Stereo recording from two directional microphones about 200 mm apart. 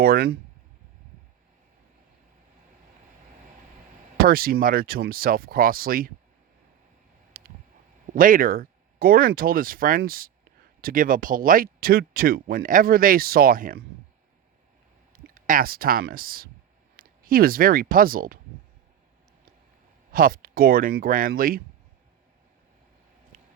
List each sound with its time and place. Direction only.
0.0 s speech: 50° right (ahead or behind)
4.3 s speech: 50° right (ahead or behind)
7.3 s a sound: 45° right (ahead or behind)
8.1 s speech: 45° right (ahead or behind)
15.1 s speech: 45° right (ahead or behind)
20.1 s speech: 45° right (ahead or behind)